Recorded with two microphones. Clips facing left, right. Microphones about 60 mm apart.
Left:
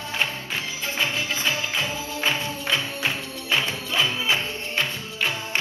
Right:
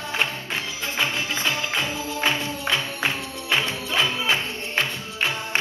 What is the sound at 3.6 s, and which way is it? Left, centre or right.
Music, right.